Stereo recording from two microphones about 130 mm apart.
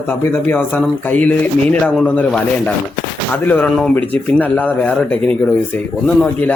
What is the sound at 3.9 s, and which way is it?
Speech, 10° left (ahead or behind).